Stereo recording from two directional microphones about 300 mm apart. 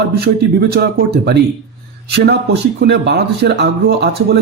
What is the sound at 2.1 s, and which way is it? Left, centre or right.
Speech, right.